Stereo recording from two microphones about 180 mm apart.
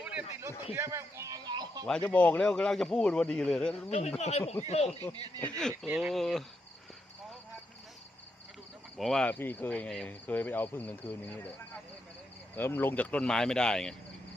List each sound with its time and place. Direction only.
0.0 s a sound: 5° right (ahead or behind); by 1.8 s 20° right (ahead or behind)
2.0 s speech: 10° left (ahead or behind)
3.8 s speech: 35° left (ahead or behind)
5.1 s speech: 25° right (ahead or behind)
5.4 s speech: 5° left (ahead or behind)
5.7 s speech: 10° right (ahead or behind)
9.0 s speech: centre (ahead or behind)